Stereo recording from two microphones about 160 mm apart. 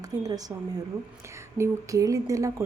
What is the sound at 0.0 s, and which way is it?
A woman's voice, 25° right (ahead or behind).